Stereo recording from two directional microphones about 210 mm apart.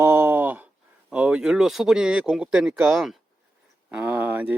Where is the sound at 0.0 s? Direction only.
10° right (ahead or behind).